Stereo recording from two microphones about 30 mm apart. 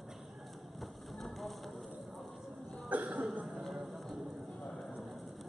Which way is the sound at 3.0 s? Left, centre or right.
Right.